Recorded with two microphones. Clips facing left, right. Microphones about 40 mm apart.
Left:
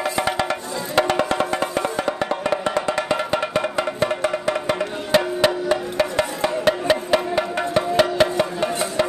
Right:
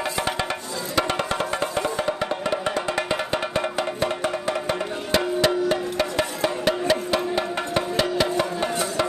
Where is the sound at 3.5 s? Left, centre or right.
Left.